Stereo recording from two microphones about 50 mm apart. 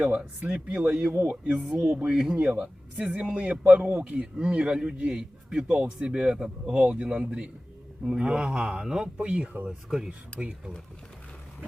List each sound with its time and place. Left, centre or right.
0.0 s a man's voice: right
1.0 s speech: right
2.0 s a man's voice: centre
9.6 s a man's voice: centre